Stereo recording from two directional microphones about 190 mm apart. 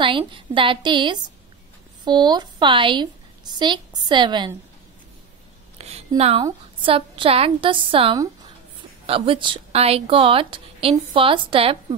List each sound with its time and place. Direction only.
0.0 s speech: 25° right (ahead or behind)
5.8 s a sound: 35° right (ahead or behind)
6.4 s speech: 25° right (ahead or behind)